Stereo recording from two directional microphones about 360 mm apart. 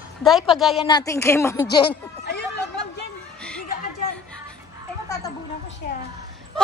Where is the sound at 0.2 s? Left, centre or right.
Centre.